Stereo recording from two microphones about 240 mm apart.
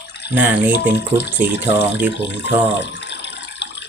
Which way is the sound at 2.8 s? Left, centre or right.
Left.